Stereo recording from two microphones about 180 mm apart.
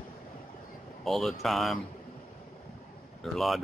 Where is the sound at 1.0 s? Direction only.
Centre (ahead or behind).